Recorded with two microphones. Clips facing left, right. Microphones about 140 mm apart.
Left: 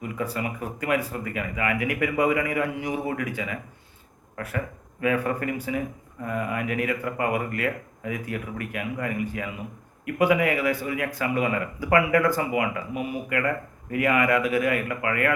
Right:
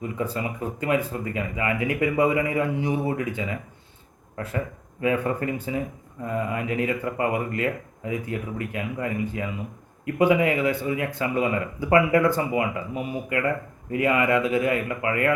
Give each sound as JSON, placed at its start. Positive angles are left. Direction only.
{"t": 0.0, "sound": "speech", "side_deg": -25}